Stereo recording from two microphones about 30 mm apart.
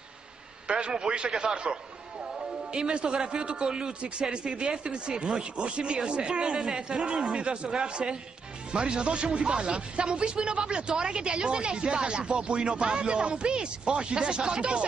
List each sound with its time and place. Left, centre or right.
0.7 s a man's voice: right